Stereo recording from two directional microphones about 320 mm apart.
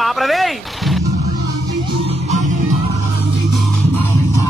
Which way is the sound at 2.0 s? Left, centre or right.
Right.